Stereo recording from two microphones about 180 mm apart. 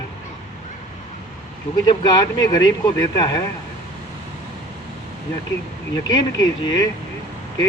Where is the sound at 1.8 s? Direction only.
20° left (ahead or behind).